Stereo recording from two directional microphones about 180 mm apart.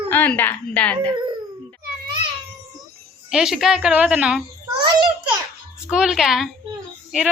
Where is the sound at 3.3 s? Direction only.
5° right (ahead or behind).